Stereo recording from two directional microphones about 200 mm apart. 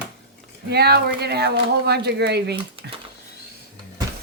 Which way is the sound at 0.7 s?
55° right (ahead or behind).